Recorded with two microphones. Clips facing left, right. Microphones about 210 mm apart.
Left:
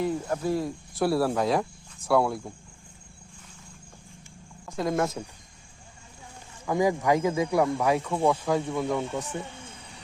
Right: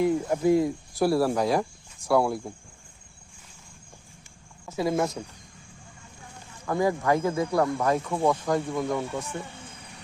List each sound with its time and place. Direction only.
0.0 s speech: 15° right (ahead or behind)
0.9 s speech: centre (ahead or behind)
4.6 s speech: 5° right (ahead or behind)
6.7 s speech: 15° left (ahead or behind)
9.1 s speech: 20° left (ahead or behind)